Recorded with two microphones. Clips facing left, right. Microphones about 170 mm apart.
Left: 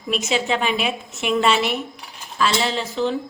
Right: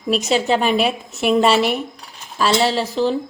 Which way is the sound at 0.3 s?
35° right (ahead or behind).